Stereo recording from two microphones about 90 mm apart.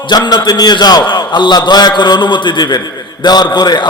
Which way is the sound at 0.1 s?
50° left (ahead or behind).